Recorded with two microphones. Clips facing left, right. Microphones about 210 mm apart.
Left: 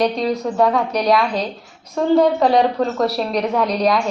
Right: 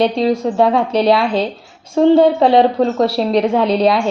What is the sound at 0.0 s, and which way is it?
Speech, 30° right (ahead or behind).